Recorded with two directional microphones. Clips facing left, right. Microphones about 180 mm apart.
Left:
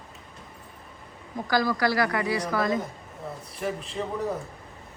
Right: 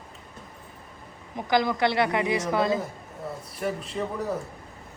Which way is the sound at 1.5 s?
20° right (ahead or behind).